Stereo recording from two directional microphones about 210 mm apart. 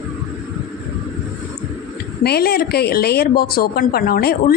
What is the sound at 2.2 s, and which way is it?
A woman's voice, 50° left (ahead or behind).